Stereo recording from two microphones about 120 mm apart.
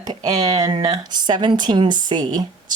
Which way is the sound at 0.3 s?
35° right (ahead or behind).